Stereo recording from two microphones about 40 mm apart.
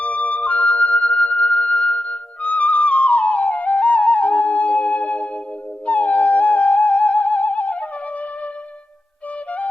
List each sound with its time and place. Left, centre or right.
0.0 s music: left
1.1 s music: left
1.4 s music: left